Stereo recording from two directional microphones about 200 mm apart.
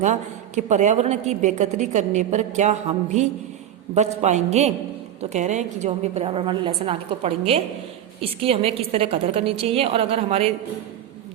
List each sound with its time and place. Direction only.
0.0 s a woman's voice: 35° right (ahead or behind)